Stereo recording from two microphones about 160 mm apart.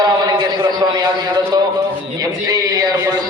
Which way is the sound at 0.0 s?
25° right (ahead or behind).